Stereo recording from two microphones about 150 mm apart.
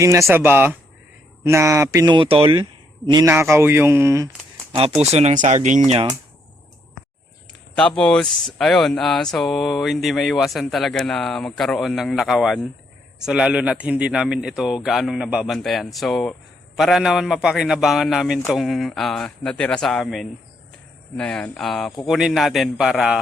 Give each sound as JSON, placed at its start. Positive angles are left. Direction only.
{"t": 0.0, "sound": "speech", "side_deg": -20}
{"t": 2.1, "sound": "speech", "side_deg": -35}
{"t": 3.2, "sound": "speech", "side_deg": -20}
{"t": 5.1, "sound": "speech", "side_deg": -50}
{"t": 7.8, "sound": "speech", "side_deg": 5}